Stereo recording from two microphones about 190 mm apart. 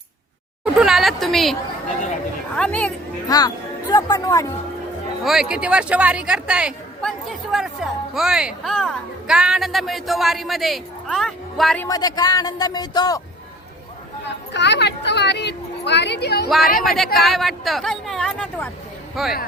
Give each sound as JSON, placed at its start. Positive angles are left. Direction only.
{"t": 0.6, "sound": "a sound", "side_deg": -5}
{"t": 2.6, "sound": "a woman's voice", "side_deg": 5}
{"t": 3.2, "sound": "speech", "side_deg": 20}
{"t": 5.2, "sound": "speech", "side_deg": 0}
{"t": 11.9, "sound": "a man's voice", "side_deg": 20}
{"t": 14.5, "sound": "speech", "side_deg": 65}
{"t": 16.8, "sound": "speech", "side_deg": 0}